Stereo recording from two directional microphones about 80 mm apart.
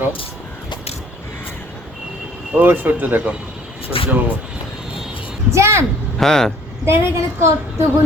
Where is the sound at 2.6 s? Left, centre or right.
Right.